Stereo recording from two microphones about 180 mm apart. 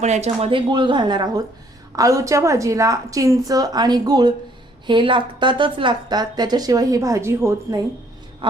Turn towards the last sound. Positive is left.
turn(degrees=-15)  # may be behind; listen again after turning